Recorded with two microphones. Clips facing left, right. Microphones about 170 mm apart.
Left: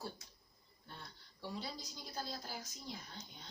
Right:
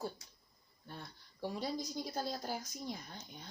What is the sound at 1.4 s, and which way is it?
A woman's voice, 45° right (ahead or behind).